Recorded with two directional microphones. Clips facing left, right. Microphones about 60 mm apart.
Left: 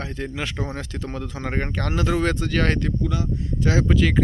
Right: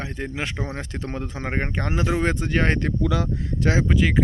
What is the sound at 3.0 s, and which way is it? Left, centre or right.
Speech, right.